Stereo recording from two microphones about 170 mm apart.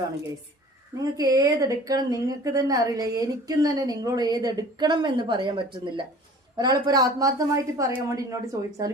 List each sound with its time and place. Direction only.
0.9 s speech: 20° right (ahead or behind)